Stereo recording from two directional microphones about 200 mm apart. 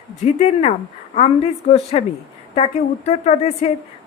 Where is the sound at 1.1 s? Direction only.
30° left (ahead or behind).